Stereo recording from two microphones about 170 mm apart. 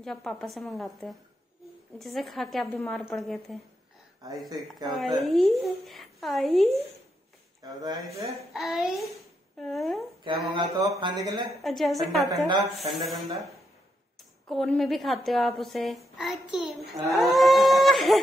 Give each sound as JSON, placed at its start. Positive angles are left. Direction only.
{"t": 0.0, "sound": "a woman's voice", "side_deg": 0}
{"t": 7.8, "sound": "speech", "side_deg": -25}
{"t": 8.5, "sound": "a woman's voice", "side_deg": 0}
{"t": 10.2, "sound": "speech", "side_deg": -30}
{"t": 11.5, "sound": "a woman's voice", "side_deg": 0}
{"t": 14.5, "sound": "a woman's voice", "side_deg": 0}